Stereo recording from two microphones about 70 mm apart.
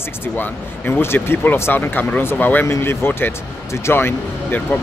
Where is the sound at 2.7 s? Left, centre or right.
Left.